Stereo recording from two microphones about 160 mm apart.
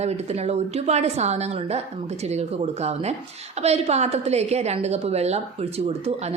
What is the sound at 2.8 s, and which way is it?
A woman's voice, 40° right (ahead or behind).